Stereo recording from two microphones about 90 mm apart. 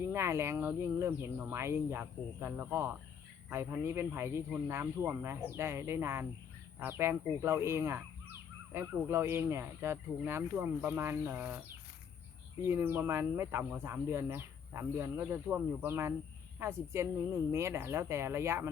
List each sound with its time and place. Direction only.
0.0 s speech: 30° right (ahead or behind)
12.6 s speech: 25° right (ahead or behind)